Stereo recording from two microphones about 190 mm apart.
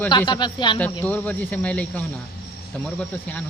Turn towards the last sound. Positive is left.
turn(degrees=5)  # may be behind; listen again after turning